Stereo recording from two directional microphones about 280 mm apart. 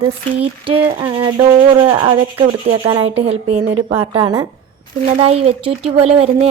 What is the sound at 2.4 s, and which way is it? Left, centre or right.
A woman's voice, right.